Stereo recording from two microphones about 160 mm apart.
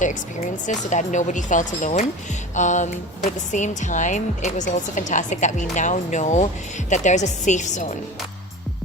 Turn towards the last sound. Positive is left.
turn(degrees=50)  # may be behind; listen again after turning